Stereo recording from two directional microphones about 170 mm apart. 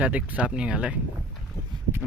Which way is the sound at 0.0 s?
10° right (ahead or behind).